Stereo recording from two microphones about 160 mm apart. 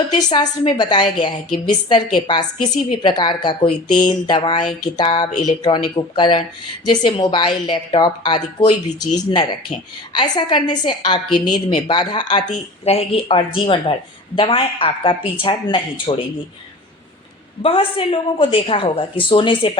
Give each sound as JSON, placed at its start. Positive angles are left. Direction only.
{"t": 0.2, "sound": "a woman's voice", "side_deg": 25}
{"t": 12.5, "sound": "a woman's voice", "side_deg": 40}
{"t": 17.6, "sound": "a woman's voice", "side_deg": 35}